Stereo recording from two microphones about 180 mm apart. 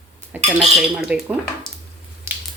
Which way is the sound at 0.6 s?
5° right (ahead or behind).